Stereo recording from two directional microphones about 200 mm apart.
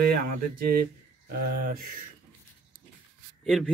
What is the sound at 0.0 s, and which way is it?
Speech, 45° right (ahead or behind).